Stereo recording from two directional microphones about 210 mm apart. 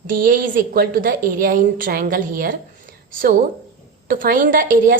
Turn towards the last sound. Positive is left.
turn(degrees=-40)  # may be behind; listen again after turning